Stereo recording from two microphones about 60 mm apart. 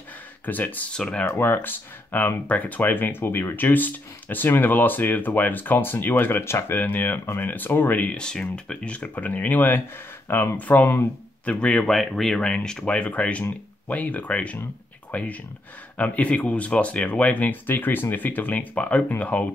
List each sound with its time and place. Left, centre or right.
0.5 s speech: left
0.9 s speech: centre
1.4 s speech: left
6.8 s speech: left
8.1 s speech: centre; by 10.6 s left
10.6 s speech: left
11.8 s speech: centre; by 19.4 s left